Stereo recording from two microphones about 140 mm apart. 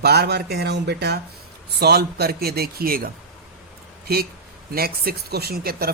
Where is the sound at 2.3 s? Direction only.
90° right.